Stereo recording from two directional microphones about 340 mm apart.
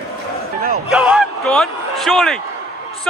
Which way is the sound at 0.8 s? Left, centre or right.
Centre.